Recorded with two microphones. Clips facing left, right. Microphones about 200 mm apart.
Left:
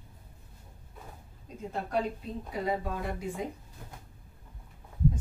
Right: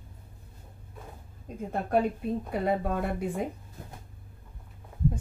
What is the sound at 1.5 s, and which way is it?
A woman's voice, 55° right (ahead or behind).